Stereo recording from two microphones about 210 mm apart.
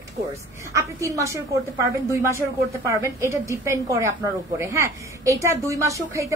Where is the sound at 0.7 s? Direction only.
15° right (ahead or behind).